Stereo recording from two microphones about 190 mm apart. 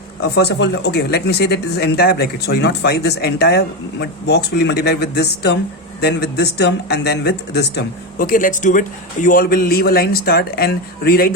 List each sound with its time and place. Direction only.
0.2 s a man's voice: 60° left (ahead or behind)